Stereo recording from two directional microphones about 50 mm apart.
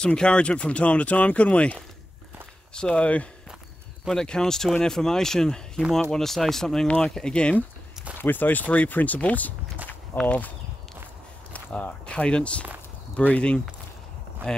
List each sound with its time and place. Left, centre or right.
0.0 s speech: centre
4.1 s speech: centre
7.2 s speech: left
8.2 s speech: left
11.5 s speech: left